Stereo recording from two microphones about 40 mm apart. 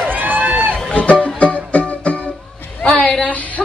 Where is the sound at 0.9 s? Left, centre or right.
Left.